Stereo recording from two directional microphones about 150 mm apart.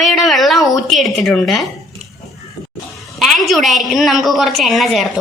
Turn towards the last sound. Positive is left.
turn(degrees=0)  # may be behind; listen again after turning